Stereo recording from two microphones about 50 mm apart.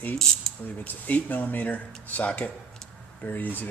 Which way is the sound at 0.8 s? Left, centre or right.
Left.